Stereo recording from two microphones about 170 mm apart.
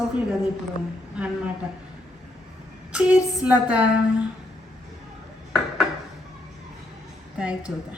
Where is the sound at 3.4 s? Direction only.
10° right (ahead or behind).